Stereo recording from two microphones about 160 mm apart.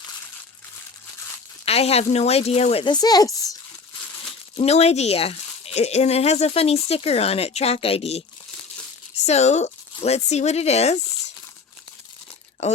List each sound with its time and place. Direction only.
1.6 s speech: 40° left (ahead or behind); by 3.2 s 25° left (ahead or behind)
4.5 s speech: 40° left (ahead or behind)
9.2 s speech: 45° left (ahead or behind)
12.6 s speech: 45° left (ahead or behind)